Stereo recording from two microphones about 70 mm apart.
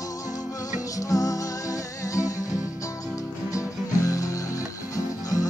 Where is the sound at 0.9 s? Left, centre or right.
Left.